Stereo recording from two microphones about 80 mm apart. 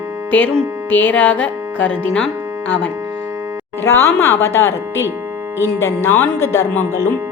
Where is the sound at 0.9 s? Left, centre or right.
Left.